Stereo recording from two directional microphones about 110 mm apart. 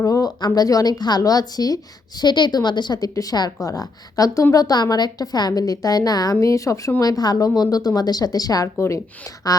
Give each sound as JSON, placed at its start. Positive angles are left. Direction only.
{"t": 0.0, "sound": "a woman's voice", "side_deg": 30}